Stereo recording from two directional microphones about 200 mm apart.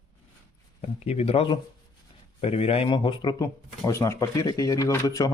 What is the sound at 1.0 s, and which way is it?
Speech, 30° left (ahead or behind).